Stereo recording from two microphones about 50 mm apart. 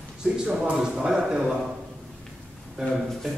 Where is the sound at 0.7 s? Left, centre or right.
Centre.